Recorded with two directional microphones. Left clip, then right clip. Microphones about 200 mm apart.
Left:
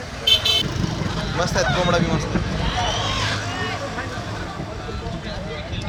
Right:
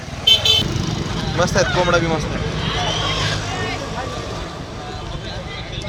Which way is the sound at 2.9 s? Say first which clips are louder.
Right 2 dB; 60° left (ahead or behind).